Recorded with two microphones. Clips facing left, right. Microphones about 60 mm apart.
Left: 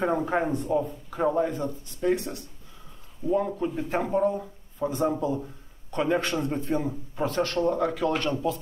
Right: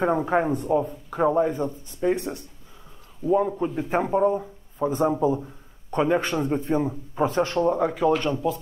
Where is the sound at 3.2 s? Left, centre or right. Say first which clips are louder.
Right 4 dB; centre.